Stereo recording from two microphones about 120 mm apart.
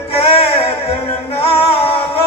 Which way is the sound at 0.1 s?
55° left (ahead or behind).